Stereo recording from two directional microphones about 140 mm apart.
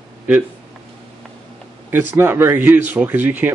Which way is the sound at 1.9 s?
15° right (ahead or behind).